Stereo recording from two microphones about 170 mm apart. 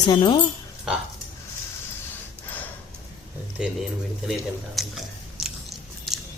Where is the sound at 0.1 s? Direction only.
25° left (ahead or behind).